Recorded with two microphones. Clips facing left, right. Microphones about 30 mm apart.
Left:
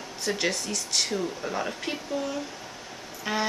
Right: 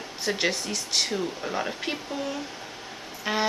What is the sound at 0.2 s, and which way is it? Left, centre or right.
Speech, centre.